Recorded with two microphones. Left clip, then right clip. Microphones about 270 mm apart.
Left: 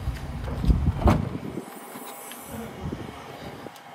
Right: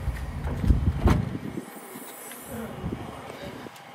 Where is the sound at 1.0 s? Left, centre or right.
Left.